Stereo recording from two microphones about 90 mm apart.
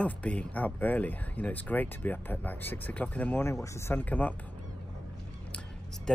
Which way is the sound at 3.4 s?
35° left (ahead or behind).